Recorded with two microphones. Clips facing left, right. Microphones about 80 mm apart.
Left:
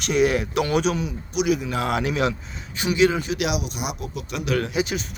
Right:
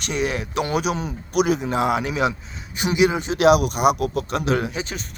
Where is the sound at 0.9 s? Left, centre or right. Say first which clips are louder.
Right 4 dB; right.